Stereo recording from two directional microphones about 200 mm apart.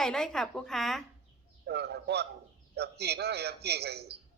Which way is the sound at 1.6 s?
55° right (ahead or behind).